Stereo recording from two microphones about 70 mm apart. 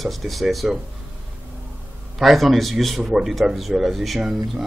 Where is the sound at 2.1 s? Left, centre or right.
Centre.